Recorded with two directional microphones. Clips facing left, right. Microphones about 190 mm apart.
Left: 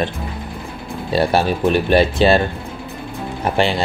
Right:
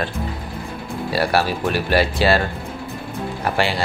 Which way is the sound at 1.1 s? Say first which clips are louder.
Left 3 dB; 20° left (ahead or behind).